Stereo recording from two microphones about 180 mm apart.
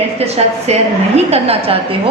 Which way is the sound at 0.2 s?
35° right (ahead or behind).